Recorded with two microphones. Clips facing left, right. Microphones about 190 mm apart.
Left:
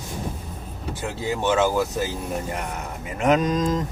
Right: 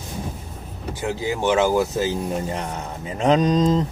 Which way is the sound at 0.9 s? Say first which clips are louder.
Right 3 dB; 15° right (ahead or behind).